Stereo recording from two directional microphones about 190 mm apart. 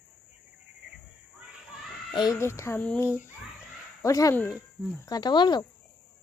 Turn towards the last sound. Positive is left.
turn(degrees=25)  # may be behind; listen again after turning